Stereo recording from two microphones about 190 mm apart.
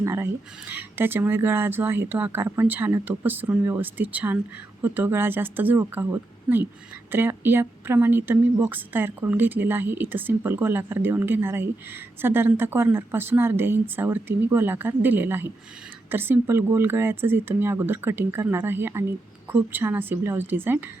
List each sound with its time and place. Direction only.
0.0 s speech: 15° right (ahead or behind)
7.1 s speech: 10° right (ahead or behind)